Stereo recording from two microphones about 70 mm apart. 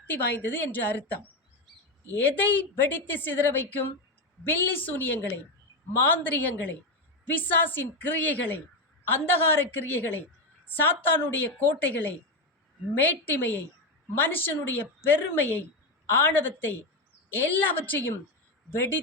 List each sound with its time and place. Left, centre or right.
0.0 s a woman's voice: left